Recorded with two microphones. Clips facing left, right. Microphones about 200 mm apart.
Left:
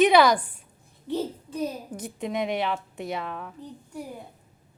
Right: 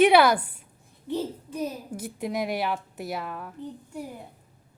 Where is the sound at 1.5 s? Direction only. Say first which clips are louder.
Left 1 dB; 10° right (ahead or behind).